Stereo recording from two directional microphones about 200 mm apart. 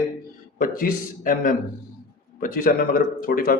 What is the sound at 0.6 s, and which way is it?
A man's voice, 45° left (ahead or behind).